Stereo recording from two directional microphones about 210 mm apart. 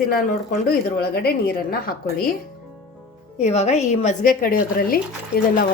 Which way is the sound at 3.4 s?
30° left (ahead or behind).